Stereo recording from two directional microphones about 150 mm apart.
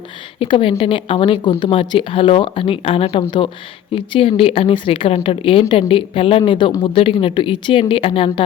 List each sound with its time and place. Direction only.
0.3 s a woman's voice: 35° left (ahead or behind)